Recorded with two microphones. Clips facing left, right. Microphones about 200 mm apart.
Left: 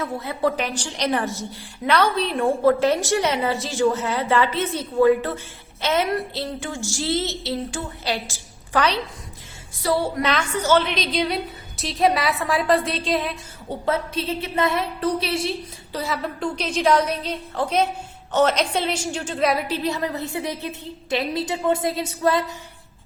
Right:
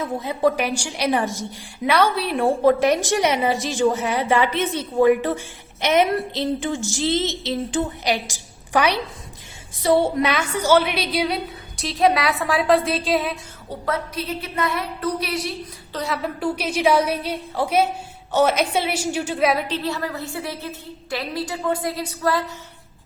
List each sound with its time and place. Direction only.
0.0 s a woman's voice: 15° right (ahead or behind)
10.2 s a woman's voice: 10° right (ahead or behind)
13.8 s a woman's voice: 25° left (ahead or behind)
15.9 s a woman's voice: 5° left (ahead or behind)
19.7 s a woman's voice: 20° left (ahead or behind)